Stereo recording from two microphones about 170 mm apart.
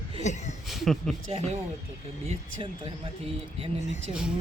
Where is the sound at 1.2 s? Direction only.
40° right (ahead or behind).